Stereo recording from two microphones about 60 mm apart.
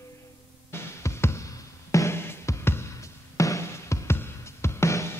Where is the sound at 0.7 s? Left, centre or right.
Left.